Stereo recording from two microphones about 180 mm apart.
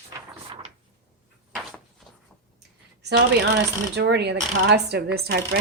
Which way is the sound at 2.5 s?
65° right (ahead or behind).